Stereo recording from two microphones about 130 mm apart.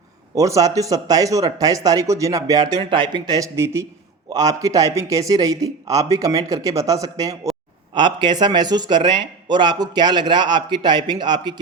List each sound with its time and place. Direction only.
0.3 s a man's voice: 25° right (ahead or behind)